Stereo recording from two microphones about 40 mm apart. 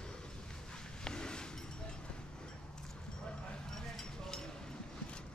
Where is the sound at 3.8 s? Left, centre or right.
Centre.